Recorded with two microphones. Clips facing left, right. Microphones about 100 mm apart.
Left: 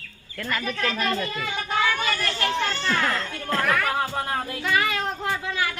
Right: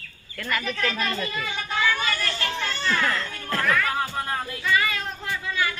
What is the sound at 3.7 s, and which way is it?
Music, 60° left (ahead or behind).